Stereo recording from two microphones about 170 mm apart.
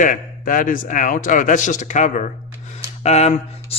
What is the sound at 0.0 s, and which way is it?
Speech, 55° left (ahead or behind).